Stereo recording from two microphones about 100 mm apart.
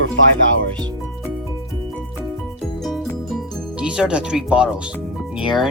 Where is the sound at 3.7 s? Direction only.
10° right (ahead or behind).